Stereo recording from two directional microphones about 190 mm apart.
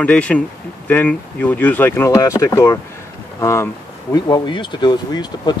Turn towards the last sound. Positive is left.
turn(degrees=20)  # may be behind; listen again after turning